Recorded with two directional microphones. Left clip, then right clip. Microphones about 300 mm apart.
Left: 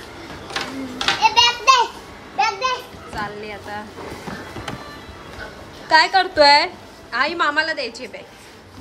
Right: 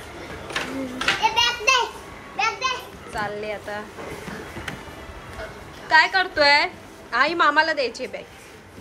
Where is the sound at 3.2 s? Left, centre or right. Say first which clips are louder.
Right 1 dB; centre.